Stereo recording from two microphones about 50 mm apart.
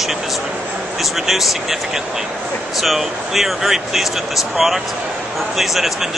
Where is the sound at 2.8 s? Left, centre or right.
Centre.